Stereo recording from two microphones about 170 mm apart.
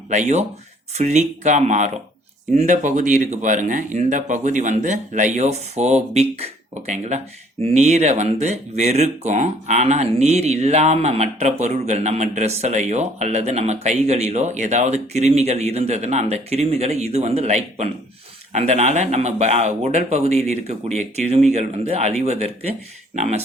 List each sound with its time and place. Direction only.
0.1 s speech: 45° right (ahead or behind)